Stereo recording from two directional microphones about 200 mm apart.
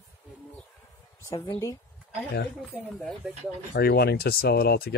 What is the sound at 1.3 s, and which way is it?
Speech, 20° left (ahead or behind).